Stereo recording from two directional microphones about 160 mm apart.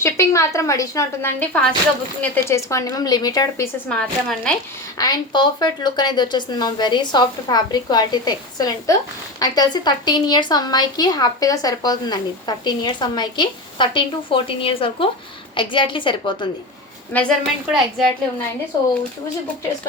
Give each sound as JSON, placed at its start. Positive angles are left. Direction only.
{"t": 0.0, "sound": "a woman's voice", "side_deg": 15}
{"t": 3.8, "sound": "a woman's voice", "side_deg": 5}
{"t": 4.9, "sound": "a woman's voice", "side_deg": 25}
{"t": 17.1, "sound": "a woman's voice", "side_deg": 10}
{"t": 17.7, "sound": "a woman's voice", "side_deg": 0}